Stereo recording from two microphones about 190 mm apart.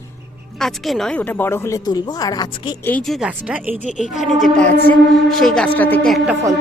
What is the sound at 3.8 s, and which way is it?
Speech, 40° left (ahead or behind).